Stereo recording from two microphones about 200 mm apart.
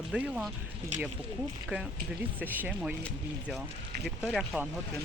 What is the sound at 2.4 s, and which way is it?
Speech, 10° right (ahead or behind).